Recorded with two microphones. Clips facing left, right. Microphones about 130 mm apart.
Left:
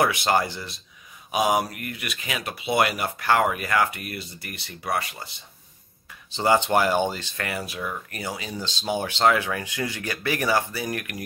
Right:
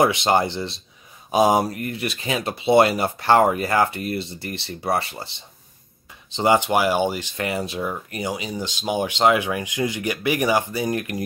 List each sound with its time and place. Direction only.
0.0 s speech: 25° right (ahead or behind)
6.3 s speech: 20° right (ahead or behind)